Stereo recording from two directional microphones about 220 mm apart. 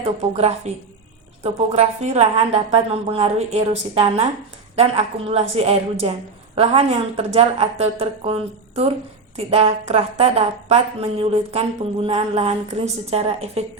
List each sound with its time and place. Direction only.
0.0 s a woman's voice: 30° right (ahead or behind)